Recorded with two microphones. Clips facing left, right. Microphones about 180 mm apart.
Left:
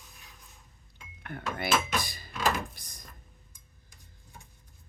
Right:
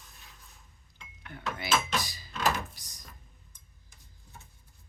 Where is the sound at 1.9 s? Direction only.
55° left (ahead or behind).